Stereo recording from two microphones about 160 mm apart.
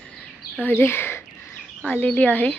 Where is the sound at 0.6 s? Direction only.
15° left (ahead or behind).